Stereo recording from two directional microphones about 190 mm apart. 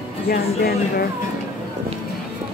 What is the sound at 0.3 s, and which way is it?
Speech, 55° left (ahead or behind).